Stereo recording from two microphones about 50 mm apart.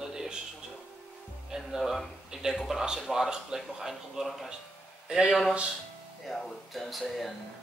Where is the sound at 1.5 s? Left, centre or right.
Centre.